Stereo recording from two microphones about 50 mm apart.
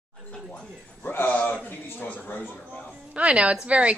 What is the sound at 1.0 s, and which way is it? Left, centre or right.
A man's voice, left.